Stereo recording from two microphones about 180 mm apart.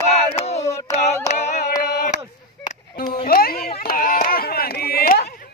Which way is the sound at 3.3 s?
55° left (ahead or behind).